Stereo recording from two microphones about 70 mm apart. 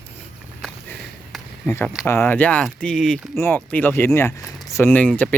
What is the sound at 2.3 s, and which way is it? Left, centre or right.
Speech, left.